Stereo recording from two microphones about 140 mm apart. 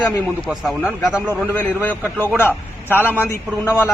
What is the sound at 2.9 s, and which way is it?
A man's voice, 15° left (ahead or behind).